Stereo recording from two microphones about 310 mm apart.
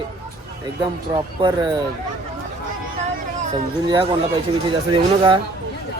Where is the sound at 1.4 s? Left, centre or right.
Centre.